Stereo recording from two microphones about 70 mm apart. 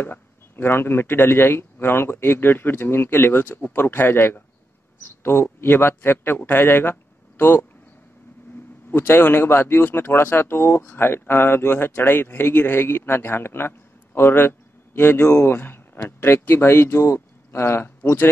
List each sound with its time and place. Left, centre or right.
0.0 s a man's voice: left
8.9 s a man's voice: left